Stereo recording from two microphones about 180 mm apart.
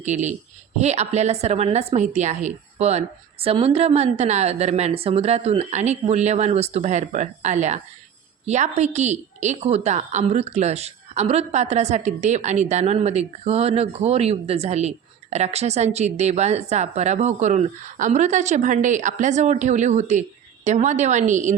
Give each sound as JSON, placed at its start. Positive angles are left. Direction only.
{"t": 0.0, "sound": "a woman's voice", "side_deg": -40}